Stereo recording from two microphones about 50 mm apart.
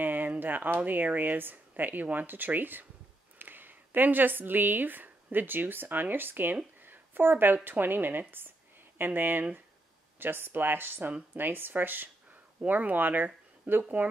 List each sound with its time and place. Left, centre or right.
0.0 s speech: right